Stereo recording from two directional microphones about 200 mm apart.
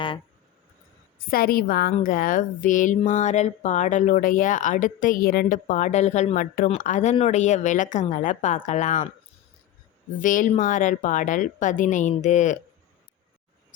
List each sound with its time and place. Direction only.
1.3 s a woman's voice: 45° left (ahead or behind)
10.2 s a woman's voice: 40° left (ahead or behind)